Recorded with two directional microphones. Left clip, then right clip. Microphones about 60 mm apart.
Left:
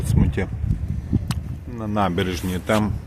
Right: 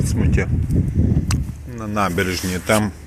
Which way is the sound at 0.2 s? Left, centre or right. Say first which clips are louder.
Even; left.